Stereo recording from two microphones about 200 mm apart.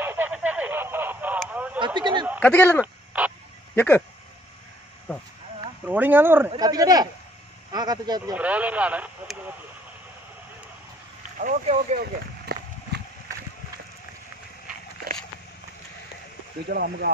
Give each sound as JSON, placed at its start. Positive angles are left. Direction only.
{"t": 0.0, "sound": "a sound", "side_deg": -10}
{"t": 2.0, "sound": "a sound", "side_deg": -25}
{"t": 2.4, "sound": "speech", "side_deg": 10}
{"t": 2.8, "sound": "crow", "side_deg": -5}
{"t": 3.7, "sound": "speech", "side_deg": 10}
{"t": 5.9, "sound": "speech", "side_deg": -10}
{"t": 8.4, "sound": "speech", "side_deg": -5}
{"t": 11.3, "sound": "speech", "side_deg": -40}
{"t": 12.5, "sound": "run", "side_deg": -55}
{"t": 16.6, "sound": "speech", "side_deg": -50}